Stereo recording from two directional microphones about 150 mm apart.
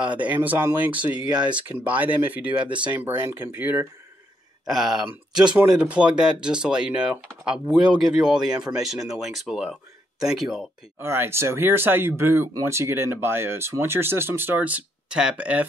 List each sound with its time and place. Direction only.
0.0 s speech: 10° right (ahead or behind)
11.0 s speech: 15° right (ahead or behind)